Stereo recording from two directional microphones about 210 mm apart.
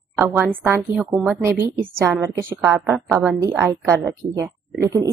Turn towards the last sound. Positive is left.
turn(degrees=-15)  # may be behind; listen again after turning